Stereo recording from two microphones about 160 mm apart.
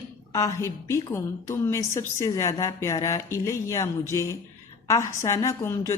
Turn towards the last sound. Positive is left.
turn(degrees=20)  # may be behind; listen again after turning